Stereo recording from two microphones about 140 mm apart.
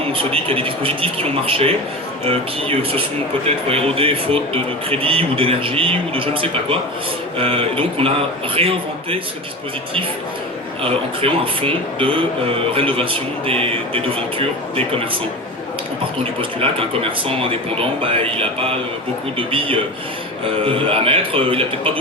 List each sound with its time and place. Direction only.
0.1 s speech: 40° right (ahead or behind)
2.2 s a sound: 45° right (ahead or behind)
3.4 s speech: 45° right (ahead or behind)
7.3 s a sound: 40° right (ahead or behind)
8.5 s speech: 40° right (ahead or behind)
10.8 s speech: 40° right (ahead or behind)
16.4 s speech: 40° right (ahead or behind)